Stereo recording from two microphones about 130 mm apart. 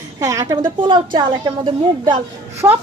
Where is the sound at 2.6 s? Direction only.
20° right (ahead or behind).